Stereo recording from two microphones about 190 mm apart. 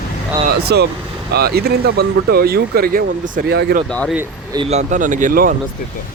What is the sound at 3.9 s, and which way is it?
Speech, 5° left (ahead or behind).